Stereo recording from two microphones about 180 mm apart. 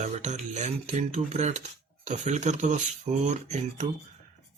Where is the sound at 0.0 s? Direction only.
40° right (ahead or behind).